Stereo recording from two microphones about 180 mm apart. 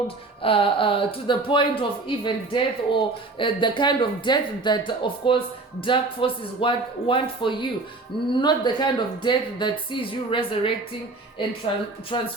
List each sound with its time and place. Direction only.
0.4 s speech: 30° left (ahead or behind)
12.1 s speech: 30° left (ahead or behind)